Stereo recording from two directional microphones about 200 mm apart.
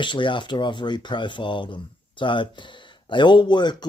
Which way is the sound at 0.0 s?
25° left (ahead or behind).